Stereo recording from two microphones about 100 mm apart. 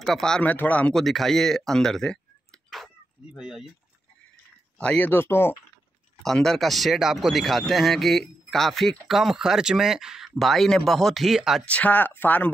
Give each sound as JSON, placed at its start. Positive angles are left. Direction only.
{"t": 0.0, "sound": "speech", "side_deg": 5}
{"t": 0.4, "sound": "speech", "side_deg": 15}
{"t": 0.9, "sound": "speech", "side_deg": 0}
{"t": 4.8, "sound": "speech", "side_deg": 15}
{"t": 6.2, "sound": "speech", "side_deg": 5}
{"t": 11.6, "sound": "speech", "side_deg": 15}